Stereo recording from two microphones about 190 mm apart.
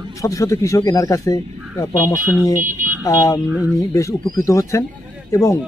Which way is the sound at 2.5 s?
45° right (ahead or behind).